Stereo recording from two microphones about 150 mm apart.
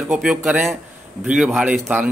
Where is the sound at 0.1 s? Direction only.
5° right (ahead or behind).